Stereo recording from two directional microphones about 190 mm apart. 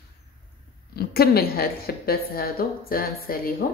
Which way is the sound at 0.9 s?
55° left (ahead or behind).